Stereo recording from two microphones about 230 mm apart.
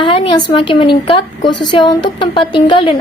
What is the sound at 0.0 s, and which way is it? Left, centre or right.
A woman's voice, left.